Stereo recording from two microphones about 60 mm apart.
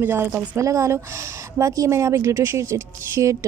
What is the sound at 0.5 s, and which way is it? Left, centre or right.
A woman's voice, right.